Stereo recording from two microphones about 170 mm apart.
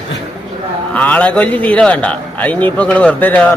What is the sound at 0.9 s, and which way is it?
A man's voice, 10° left (ahead or behind).